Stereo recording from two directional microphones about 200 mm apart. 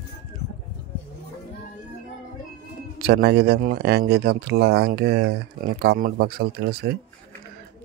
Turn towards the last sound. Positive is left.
turn(degrees=-50)  # may be behind; listen again after turning